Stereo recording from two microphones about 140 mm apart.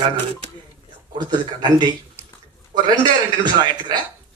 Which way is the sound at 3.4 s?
30° right (ahead or behind).